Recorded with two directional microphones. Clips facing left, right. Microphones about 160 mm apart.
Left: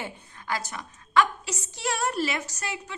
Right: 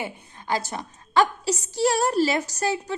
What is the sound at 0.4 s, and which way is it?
A woman's voice, 30° right (ahead or behind).